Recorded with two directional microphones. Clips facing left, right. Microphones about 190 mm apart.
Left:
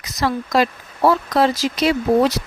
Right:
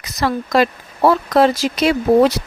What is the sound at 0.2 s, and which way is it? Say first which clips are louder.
Speech: right 2 dB; 55° right (ahead or behind).